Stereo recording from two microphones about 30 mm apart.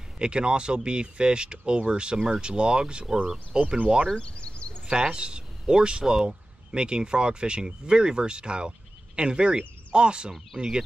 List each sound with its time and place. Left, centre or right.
0.2 s speech: right
4.2 s a sound: left
5.1 s speech: right